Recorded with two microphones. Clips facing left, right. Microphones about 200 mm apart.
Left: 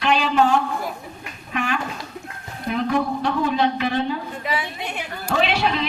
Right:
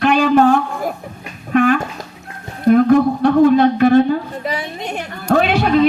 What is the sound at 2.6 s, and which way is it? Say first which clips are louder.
Speech: right 11 dB; 50° right (ahead or behind).